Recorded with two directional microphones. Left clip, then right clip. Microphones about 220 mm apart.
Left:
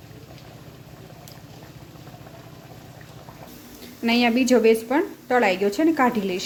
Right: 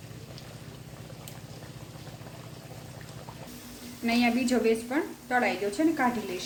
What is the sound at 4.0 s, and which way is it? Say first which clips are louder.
A woman's voice: left 6 dB; 45° left (ahead or behind).